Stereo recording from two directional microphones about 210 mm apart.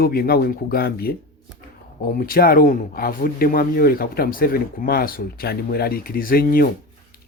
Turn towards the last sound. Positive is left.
turn(degrees=45)  # may be behind; listen again after turning